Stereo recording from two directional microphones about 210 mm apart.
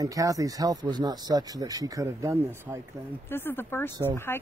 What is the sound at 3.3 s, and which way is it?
Speech, 10° left (ahead or behind).